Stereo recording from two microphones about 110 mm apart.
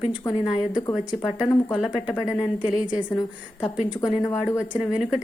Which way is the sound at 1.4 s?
5° right (ahead or behind).